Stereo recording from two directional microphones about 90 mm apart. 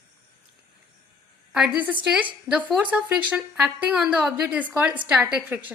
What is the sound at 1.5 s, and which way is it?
A woman's voice, 5° right (ahead or behind).